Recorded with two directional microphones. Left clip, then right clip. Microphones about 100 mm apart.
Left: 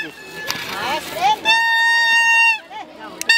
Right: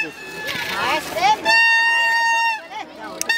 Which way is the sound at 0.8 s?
Centre (ahead or behind).